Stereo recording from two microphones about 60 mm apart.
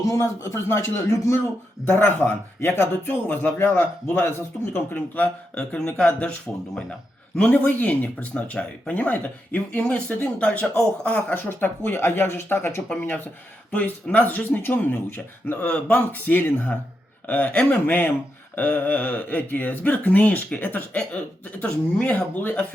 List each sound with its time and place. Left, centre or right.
0.1 s speech: left
1.8 s speech: left; by 6.3 s centre
7.3 s speech: left
11.3 s speech: left